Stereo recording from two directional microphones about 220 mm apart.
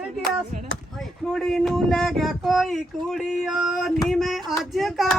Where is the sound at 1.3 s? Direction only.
Centre (ahead or behind).